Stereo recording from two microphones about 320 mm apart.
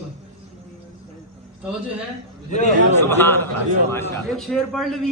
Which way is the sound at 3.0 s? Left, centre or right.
Centre.